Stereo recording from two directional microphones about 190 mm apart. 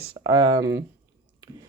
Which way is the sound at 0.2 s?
20° right (ahead or behind).